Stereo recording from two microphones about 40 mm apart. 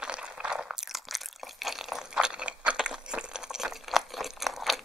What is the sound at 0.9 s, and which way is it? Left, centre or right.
Crunch, centre.